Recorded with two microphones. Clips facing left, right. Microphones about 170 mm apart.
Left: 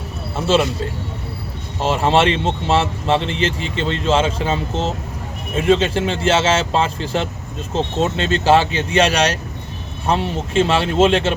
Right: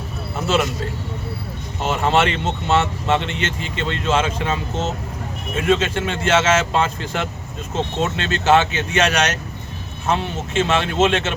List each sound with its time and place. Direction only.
0.3 s speech: 30° left (ahead or behind)
1.8 s speech: 30° left (ahead or behind)